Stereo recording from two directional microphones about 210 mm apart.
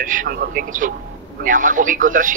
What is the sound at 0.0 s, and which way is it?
Speech, 40° right (ahead or behind).